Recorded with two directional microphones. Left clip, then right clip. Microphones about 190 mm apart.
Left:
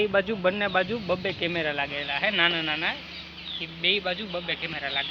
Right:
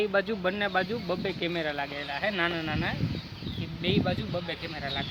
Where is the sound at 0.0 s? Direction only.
40° left (ahead or behind); by 1.9 s 20° left (ahead or behind).